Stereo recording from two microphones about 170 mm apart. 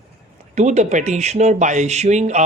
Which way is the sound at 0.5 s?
40° right (ahead or behind).